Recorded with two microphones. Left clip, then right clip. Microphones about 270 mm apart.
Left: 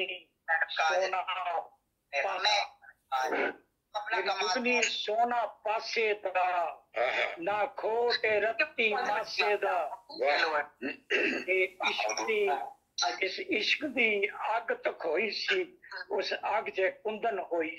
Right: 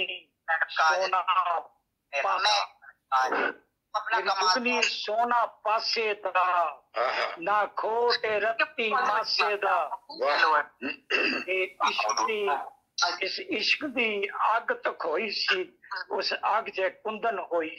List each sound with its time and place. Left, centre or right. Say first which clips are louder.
0.0 s telephone: right 3 dB; centre
2.0 s speech: right 4 dB; centre